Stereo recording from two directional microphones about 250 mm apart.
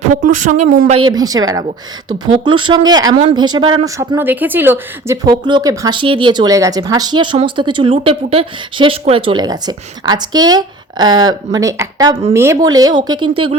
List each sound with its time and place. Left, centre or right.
0.3 s speech: right
0.7 s speech: right
2.6 s speech: centre